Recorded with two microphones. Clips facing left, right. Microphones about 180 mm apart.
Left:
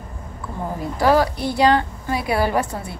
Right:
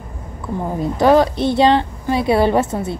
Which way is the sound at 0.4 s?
20° right (ahead or behind).